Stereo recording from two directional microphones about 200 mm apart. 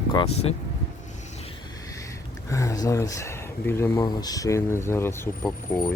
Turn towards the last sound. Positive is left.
turn(degrees=15)  # may be behind; listen again after turning